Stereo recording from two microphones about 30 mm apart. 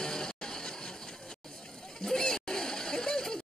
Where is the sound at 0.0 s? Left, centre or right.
Left.